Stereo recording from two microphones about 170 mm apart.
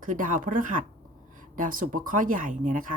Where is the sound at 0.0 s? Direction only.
50° right (ahead or behind).